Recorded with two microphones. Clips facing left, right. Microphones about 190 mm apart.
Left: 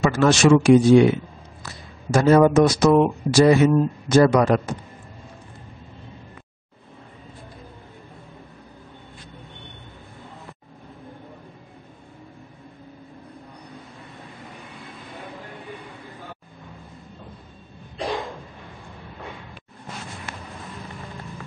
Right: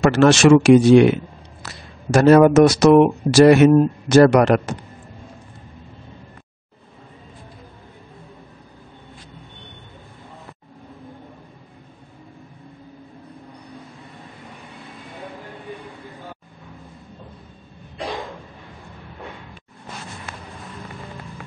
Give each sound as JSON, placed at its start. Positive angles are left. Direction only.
{"t": 0.0, "sound": "speech", "side_deg": -75}